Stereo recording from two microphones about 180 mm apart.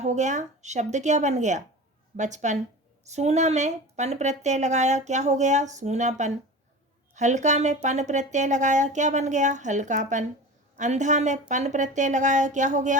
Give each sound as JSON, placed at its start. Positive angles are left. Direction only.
{"t": 0.0, "sound": "a woman's voice", "side_deg": -40}